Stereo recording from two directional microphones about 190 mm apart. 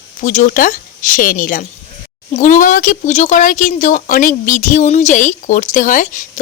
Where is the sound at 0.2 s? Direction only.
40° left (ahead or behind).